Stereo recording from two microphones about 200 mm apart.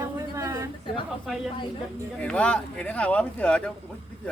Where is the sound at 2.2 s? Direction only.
5° left (ahead or behind).